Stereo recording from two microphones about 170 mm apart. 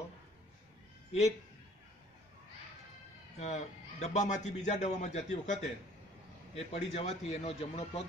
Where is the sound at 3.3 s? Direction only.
45° left (ahead or behind).